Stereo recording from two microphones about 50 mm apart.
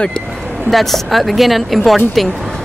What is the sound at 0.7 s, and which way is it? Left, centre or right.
Speech, centre.